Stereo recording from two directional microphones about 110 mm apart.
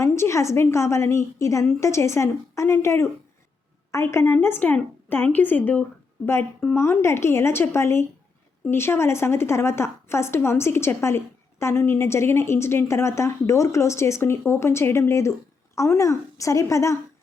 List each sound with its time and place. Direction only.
0.0 s a woman's voice: 25° left (ahead or behind)